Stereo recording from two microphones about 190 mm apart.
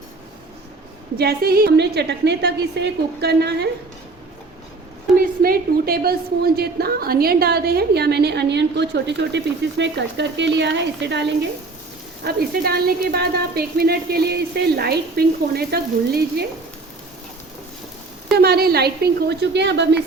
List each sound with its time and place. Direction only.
1.2 s a woman's voice: 55° right (ahead or behind)
5.1 s a woman's voice: 50° right (ahead or behind)
18.3 s a woman's voice: 55° right (ahead or behind)